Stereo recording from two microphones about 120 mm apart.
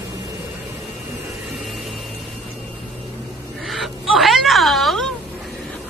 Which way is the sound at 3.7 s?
Centre (ahead or behind).